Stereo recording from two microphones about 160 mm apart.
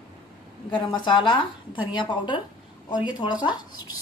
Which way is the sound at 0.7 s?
30° left (ahead or behind).